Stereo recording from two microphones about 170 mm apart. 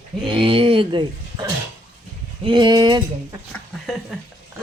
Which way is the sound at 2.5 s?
25° right (ahead or behind).